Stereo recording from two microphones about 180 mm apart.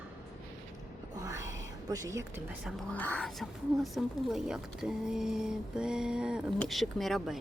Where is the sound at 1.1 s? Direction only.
20° right (ahead or behind).